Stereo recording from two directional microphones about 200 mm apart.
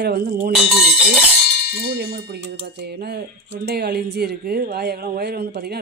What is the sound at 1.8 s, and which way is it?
Speech, 55° right (ahead or behind).